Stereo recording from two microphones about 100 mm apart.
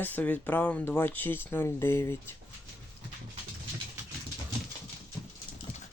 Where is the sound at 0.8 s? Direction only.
20° left (ahead or behind).